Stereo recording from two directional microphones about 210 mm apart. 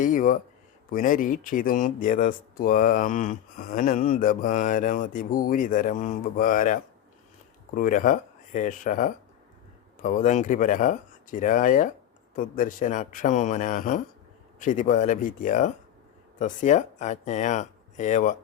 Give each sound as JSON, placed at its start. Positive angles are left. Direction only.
{"t": 0.0, "sound": "speech", "side_deg": 40}